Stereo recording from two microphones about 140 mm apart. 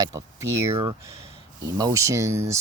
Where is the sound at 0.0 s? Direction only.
20° right (ahead or behind).